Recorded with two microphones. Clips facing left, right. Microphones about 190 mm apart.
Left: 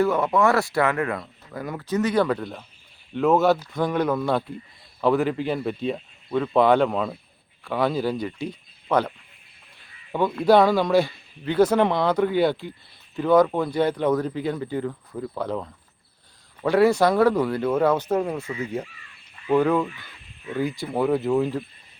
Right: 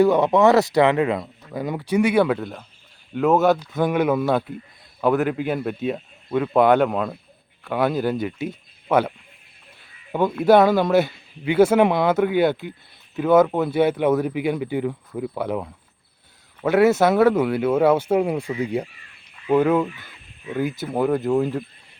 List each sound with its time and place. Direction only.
0.0 s a man's voice: 20° right (ahead or behind); by 21.6 s centre (ahead or behind)